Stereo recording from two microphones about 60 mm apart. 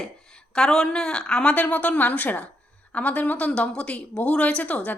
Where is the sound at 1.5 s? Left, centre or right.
Left.